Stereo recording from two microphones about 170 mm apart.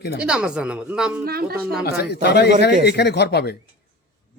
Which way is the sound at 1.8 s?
70° left (ahead or behind).